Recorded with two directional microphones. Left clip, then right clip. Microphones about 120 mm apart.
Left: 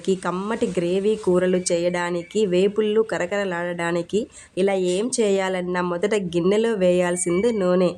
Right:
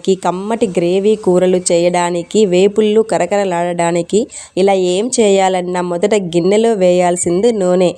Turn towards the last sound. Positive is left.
turn(degrees=-45)  # may be behind; listen again after turning